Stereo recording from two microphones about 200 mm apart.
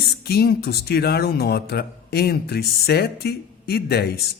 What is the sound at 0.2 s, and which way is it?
Speech, 50° left (ahead or behind).